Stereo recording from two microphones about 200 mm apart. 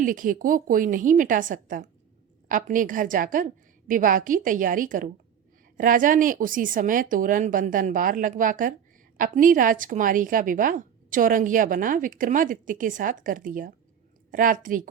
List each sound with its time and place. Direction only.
0.0 s a woman's voice: 40° right (ahead or behind)